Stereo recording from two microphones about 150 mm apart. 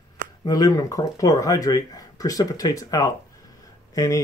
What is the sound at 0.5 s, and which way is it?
Speech, 25° left (ahead or behind).